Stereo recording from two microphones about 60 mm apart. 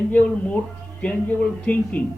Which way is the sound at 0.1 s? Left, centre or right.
Left.